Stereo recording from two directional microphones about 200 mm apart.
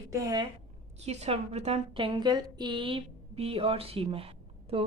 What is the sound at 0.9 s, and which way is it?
A woman's voice, 35° right (ahead or behind).